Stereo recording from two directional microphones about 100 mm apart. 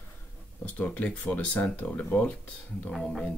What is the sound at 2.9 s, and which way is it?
Speech, centre (ahead or behind).